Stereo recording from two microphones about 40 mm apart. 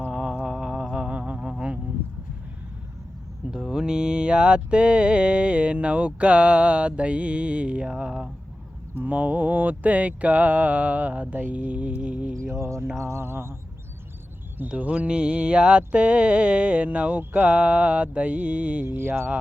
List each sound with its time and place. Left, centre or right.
0.1 s mantra: centre
1.1 s a sound: right
3.5 s mantra: centre
9.0 s mantra: right
13.1 s a sound: right
14.8 s mantra: right
18.9 s speech: right